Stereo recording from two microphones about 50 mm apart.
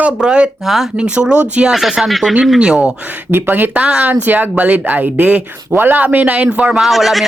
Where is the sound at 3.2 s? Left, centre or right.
Right.